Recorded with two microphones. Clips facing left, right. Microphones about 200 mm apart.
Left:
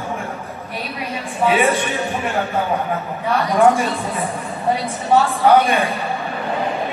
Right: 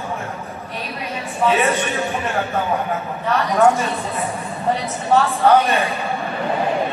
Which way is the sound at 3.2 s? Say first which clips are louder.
Left 1 dB; 10° left (ahead or behind).